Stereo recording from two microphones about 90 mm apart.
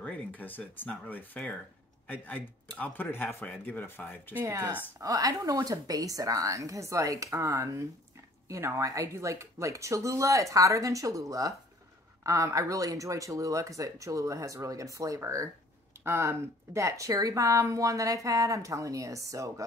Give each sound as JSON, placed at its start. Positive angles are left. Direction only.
{"t": 0.0, "sound": "speech", "side_deg": 15}
{"t": 5.0, "sound": "speech", "side_deg": -40}